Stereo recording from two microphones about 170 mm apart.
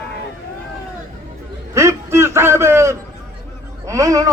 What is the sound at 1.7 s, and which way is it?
A man's voice, 15° right (ahead or behind).